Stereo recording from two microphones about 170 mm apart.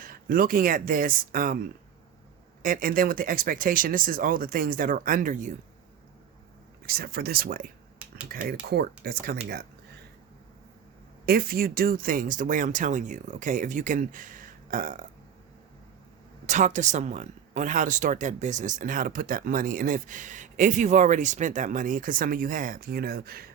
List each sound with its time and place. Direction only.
0.0 s speech: 55° right (ahead or behind)
2.6 s speech: 55° right (ahead or behind)
6.8 s speech: 65° right (ahead or behind)
11.3 s speech: 60° right (ahead or behind)
16.5 s speech: 45° right (ahead or behind); by 23.5 s 60° right (ahead or behind)